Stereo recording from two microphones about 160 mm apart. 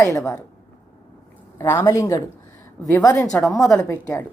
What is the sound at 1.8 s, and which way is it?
A woman's voice, 20° left (ahead or behind).